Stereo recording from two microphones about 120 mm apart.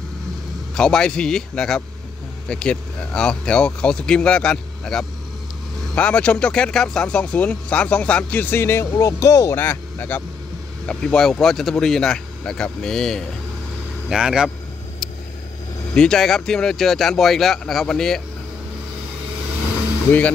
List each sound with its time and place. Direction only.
0.7 s speech: 5° left (ahead or behind)
15.9 s speech: 5° left (ahead or behind)